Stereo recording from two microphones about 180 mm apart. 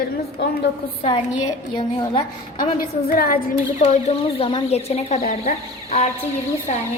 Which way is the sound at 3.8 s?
35° left (ahead or behind).